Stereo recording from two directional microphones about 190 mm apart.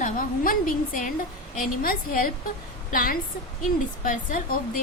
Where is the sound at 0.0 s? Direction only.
45° left (ahead or behind).